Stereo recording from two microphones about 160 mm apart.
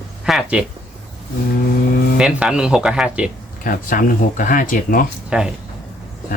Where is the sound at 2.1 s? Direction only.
5° right (ahead or behind).